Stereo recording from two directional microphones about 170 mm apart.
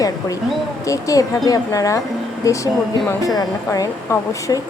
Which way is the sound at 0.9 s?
20° left (ahead or behind).